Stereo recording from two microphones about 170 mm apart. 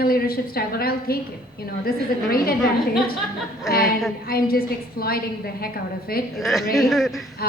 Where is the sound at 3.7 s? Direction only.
65° left (ahead or behind).